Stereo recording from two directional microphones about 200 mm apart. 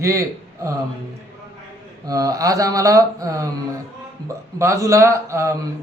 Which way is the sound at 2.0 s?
15° right (ahead or behind).